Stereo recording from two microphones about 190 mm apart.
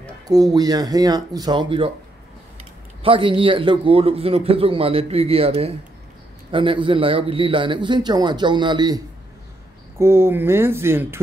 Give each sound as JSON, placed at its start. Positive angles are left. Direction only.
{"t": 0.3, "sound": "a man's voice", "side_deg": -20}
{"t": 3.0, "sound": "a man's voice", "side_deg": -25}